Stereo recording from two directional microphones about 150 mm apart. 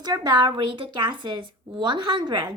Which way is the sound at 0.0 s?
25° right (ahead or behind).